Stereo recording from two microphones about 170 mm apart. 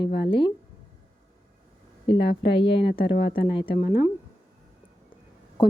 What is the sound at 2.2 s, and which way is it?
Speech, 90° left.